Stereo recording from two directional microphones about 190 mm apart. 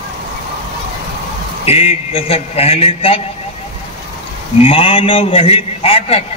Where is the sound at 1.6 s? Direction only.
30° left (ahead or behind).